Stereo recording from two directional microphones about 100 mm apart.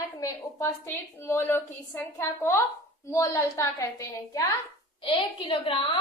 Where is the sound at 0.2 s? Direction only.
25° left (ahead or behind).